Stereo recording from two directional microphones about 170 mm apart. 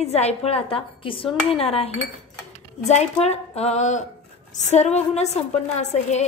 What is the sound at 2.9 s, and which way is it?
A woman's voice, 40° left (ahead or behind).